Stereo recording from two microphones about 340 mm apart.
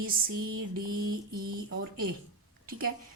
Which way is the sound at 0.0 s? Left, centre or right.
Right.